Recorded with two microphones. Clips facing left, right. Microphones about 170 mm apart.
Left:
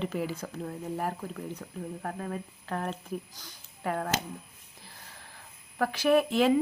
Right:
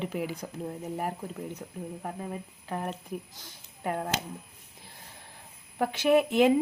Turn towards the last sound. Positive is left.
turn(degrees=-20)  # may be behind; listen again after turning